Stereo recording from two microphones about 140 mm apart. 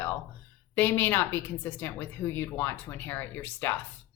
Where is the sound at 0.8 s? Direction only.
15° left (ahead or behind).